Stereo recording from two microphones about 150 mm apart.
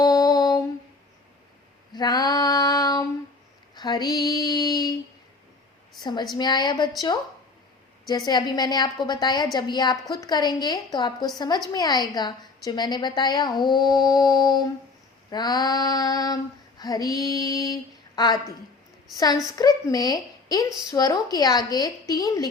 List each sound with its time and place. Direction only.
0.0 s a sound: 25° left (ahead or behind)
1.9 s female singing: 25° left (ahead or behind)
3.8 s a woman's voice: 30° left (ahead or behind)
6.0 s a woman's voice: 30° left (ahead or behind)
8.0 s a woman's voice: 25° left (ahead or behind)
19.1 s a woman's voice: 25° left (ahead or behind)